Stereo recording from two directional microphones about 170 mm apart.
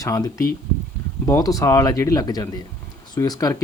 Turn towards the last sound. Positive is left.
turn(degrees=20)  # may be behind; listen again after turning